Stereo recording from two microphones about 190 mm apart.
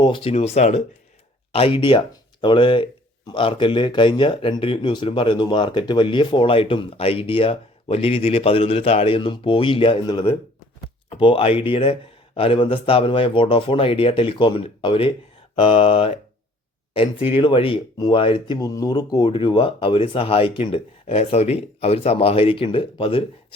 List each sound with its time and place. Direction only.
0.0 s speech: 30° left (ahead or behind)